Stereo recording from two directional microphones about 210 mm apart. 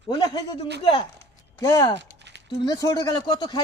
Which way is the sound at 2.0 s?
55° right (ahead or behind).